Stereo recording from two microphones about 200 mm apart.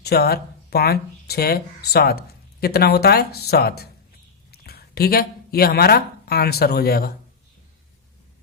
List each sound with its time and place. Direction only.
0.0 s speech: 50° left (ahead or behind)